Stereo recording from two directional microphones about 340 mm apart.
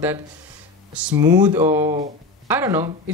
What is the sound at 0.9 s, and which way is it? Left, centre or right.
Speech, centre.